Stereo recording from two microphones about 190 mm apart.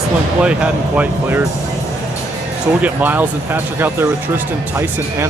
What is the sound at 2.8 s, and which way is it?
Speech, 10° right (ahead or behind).